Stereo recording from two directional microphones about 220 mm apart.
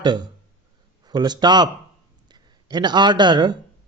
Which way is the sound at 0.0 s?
20° right (ahead or behind).